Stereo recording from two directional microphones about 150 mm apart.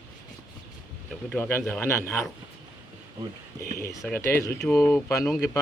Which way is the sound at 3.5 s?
20° left (ahead or behind).